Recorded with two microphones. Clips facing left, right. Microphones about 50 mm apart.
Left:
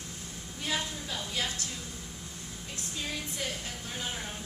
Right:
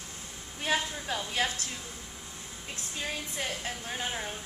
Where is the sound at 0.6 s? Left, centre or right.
Right.